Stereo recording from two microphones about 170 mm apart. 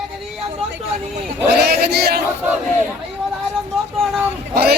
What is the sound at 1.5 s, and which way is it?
Speech, 70° right (ahead or behind).